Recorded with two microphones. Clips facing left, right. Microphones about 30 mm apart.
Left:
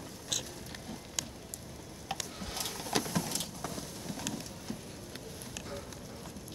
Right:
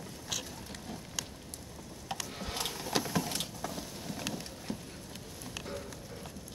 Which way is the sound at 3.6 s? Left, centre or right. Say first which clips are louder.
Right 1 dB; centre.